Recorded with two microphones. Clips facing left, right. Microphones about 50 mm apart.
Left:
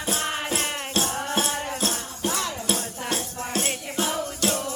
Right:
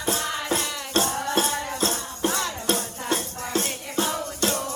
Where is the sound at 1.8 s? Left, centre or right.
Right.